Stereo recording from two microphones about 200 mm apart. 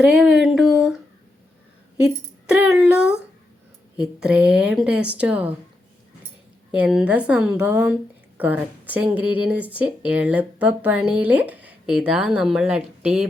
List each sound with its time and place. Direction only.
0.0 s speech: 5° right (ahead or behind)
2.0 s speech: 5° right (ahead or behind)
6.7 s speech: 5° right (ahead or behind)